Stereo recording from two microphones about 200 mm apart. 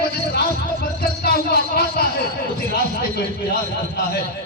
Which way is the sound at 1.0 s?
50° left (ahead or behind).